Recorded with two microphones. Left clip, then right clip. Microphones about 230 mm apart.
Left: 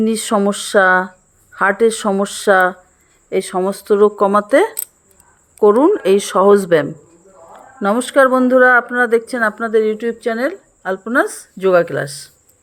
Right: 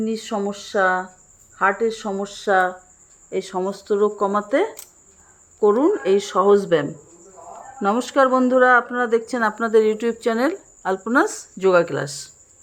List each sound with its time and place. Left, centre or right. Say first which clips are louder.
0.0 s speech: left 9 dB; left; by 12.3 s centre